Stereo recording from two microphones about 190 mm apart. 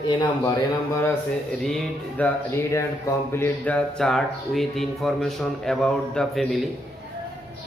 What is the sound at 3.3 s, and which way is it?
Speech, 10° left (ahead or behind).